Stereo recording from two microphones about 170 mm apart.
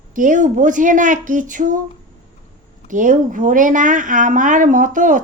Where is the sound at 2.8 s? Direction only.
50° right (ahead or behind).